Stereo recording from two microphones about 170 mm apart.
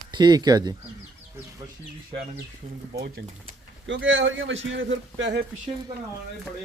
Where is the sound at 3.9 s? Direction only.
90° right.